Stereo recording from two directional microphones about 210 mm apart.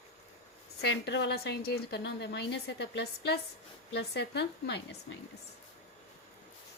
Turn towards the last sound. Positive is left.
turn(degrees=55)  # may be behind; listen again after turning